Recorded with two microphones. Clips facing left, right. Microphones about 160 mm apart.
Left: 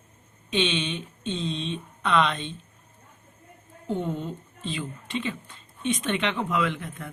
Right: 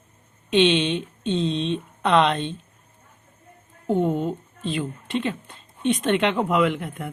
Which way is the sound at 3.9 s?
50° right (ahead or behind).